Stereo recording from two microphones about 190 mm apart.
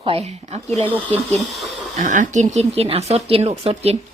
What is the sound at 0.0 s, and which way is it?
Speech, 30° right (ahead or behind).